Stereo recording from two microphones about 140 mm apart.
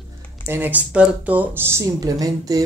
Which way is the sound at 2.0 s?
25° right (ahead or behind).